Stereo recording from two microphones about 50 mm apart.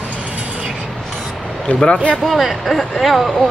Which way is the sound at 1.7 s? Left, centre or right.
Centre.